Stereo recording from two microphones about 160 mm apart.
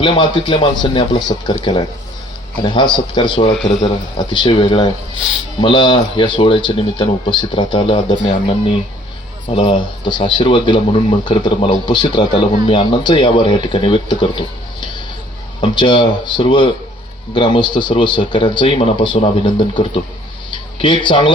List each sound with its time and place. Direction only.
0.0 s speech: 30° left (ahead or behind)
2.6 s speech: 30° left (ahead or behind)
8.2 s speech: 50° left (ahead or behind)
9.5 s speech: 35° left (ahead or behind)
20.5 s a sound: 30° left (ahead or behind)